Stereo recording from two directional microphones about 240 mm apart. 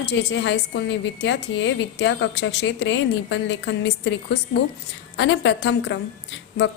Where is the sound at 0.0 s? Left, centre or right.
Left.